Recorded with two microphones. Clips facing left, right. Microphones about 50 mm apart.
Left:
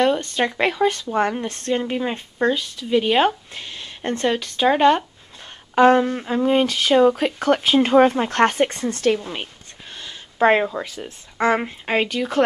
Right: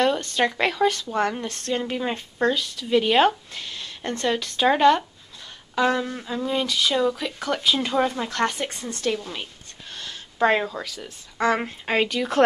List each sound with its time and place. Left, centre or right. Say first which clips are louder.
0.4 s speech: even; centre
3.5 s speech: left 1 dB; left
4.3 s speech: left 1 dB; centre
5.8 s speech: left 8 dB; left
9.1 s speech: left 5 dB; left
11.6 s speech: left 2 dB; centre